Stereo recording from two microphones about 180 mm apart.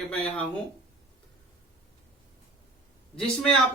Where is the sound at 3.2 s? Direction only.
Centre (ahead or behind).